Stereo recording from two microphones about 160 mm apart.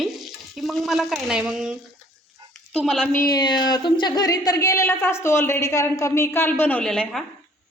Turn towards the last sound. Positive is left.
turn(degrees=5)  # may be behind; listen again after turning